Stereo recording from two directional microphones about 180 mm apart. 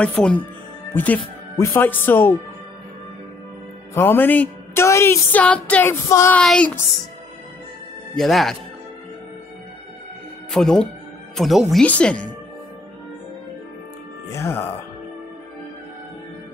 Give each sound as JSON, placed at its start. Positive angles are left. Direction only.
{"t": 0.0, "sound": "speech", "side_deg": 5}
{"t": 3.9, "sound": "speech", "side_deg": 10}
{"t": 6.4, "sound": "speech", "side_deg": 5}
{"t": 8.1, "sound": "speech", "side_deg": 0}
{"t": 10.5, "sound": "speech", "side_deg": 5}
{"t": 14.3, "sound": "speech", "side_deg": 15}